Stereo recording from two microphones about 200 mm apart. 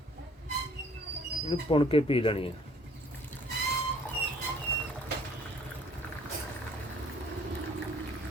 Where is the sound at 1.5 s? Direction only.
25° left (ahead or behind).